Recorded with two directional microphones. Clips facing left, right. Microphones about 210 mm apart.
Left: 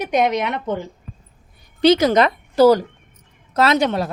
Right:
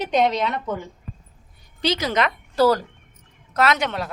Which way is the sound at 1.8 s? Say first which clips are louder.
Left 9 dB; 50° left (ahead or behind).